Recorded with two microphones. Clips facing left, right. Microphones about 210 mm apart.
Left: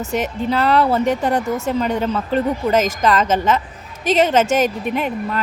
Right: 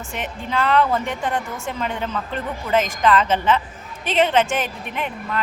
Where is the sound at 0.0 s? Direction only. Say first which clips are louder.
Left 9 dB; 40° left (ahead or behind).